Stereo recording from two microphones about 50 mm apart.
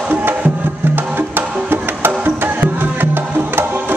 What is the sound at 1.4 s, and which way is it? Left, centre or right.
Music, centre.